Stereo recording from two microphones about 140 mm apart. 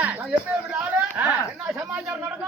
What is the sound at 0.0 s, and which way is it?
Speech, 10° right (ahead or behind).